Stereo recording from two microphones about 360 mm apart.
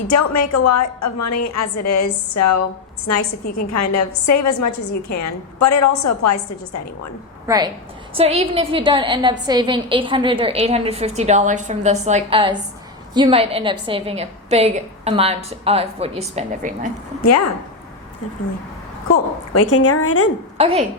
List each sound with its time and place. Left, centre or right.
0.1 s a woman's voice: left
7.4 s a woman's voice: centre
17.2 s a woman's voice: left
19.1 s a woman's voice: left
20.6 s a woman's voice: centre